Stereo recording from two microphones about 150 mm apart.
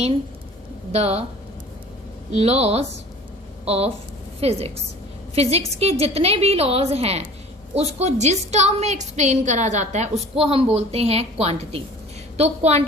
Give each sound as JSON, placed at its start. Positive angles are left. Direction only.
{"t": 0.9, "sound": "a woman's voice", "side_deg": -45}
{"t": 2.3, "sound": "a woman's voice", "side_deg": -45}